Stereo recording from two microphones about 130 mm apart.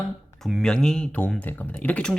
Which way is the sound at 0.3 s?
Centre (ahead or behind).